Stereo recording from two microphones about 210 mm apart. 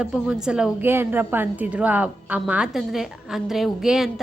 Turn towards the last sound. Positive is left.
turn(degrees=0)  # may be behind; listen again after turning